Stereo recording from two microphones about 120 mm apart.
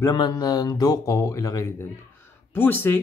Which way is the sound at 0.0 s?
30° left (ahead or behind).